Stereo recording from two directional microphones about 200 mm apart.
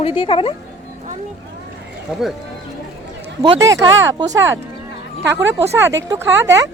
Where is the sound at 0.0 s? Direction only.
25° left (ahead or behind).